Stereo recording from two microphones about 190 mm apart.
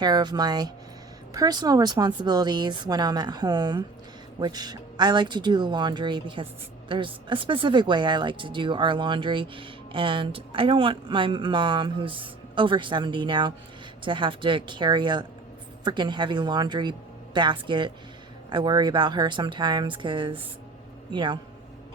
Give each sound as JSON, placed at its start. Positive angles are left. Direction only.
{"t": 0.0, "sound": "speech", "side_deg": -20}